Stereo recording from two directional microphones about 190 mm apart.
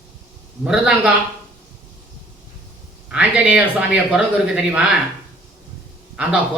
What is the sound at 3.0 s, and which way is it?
Speech, 5° right (ahead or behind).